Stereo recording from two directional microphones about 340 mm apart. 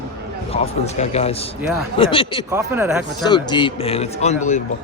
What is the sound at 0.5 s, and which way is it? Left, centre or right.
A man's voice, centre.